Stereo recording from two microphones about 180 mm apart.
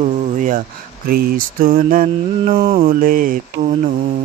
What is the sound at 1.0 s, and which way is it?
Mantra, 55° right (ahead or behind).